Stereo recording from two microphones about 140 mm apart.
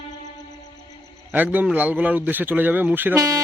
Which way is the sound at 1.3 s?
10° right (ahead or behind).